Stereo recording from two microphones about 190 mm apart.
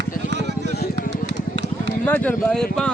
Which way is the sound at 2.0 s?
10° left (ahead or behind).